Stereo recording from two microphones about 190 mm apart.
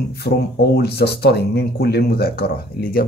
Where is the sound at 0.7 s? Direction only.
60° left (ahead or behind).